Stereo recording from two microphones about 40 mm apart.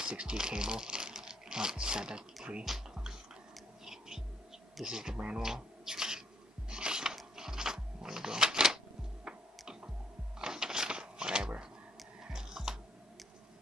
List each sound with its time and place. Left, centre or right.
0.0 s speech: right
2.6 s music: centre
3.8 s whispering: centre
4.8 s speech: centre
5.1 s speech: right
5.4 s rub: centre
6.7 s a sound: right
12.2 s music: centre